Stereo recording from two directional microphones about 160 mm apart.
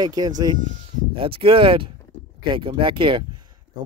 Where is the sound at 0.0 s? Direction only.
25° right (ahead or behind).